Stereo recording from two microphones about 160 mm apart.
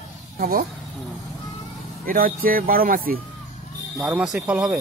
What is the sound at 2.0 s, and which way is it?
Speech, 65° right (ahead or behind).